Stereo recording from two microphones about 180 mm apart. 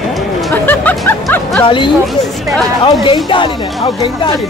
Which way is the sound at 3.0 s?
25° left (ahead or behind).